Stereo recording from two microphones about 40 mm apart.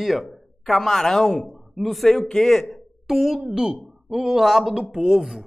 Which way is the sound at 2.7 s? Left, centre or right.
Centre.